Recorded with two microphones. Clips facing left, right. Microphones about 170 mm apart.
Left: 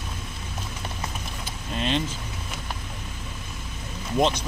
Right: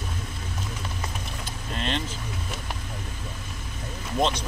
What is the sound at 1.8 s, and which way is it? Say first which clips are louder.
Vehicle: left 4 dB; 15° left (ahead or behind).